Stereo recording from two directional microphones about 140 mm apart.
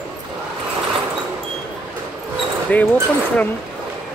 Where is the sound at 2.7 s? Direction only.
10° left (ahead or behind).